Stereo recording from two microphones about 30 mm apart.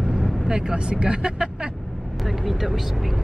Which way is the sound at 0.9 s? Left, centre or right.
Right.